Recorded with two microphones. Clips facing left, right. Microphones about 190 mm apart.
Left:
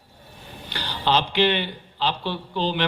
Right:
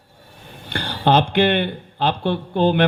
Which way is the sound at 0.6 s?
55° right (ahead or behind).